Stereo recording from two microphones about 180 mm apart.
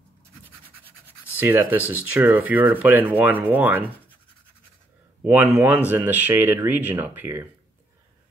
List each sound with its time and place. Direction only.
1.3 s speech: 10° right (ahead or behind)
5.2 s speech: 10° right (ahead or behind)